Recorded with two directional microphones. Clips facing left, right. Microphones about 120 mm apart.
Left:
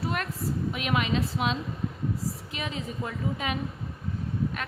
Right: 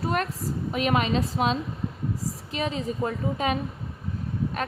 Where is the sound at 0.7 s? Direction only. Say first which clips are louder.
Right 6 dB; 40° right (ahead or behind).